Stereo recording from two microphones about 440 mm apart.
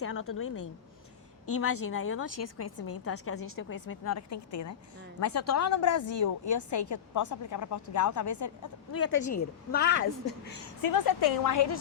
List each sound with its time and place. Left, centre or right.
0.0 s a woman's voice: left
10.8 s a woman's voice: left